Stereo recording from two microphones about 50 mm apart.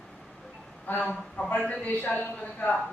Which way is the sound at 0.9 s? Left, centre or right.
Left.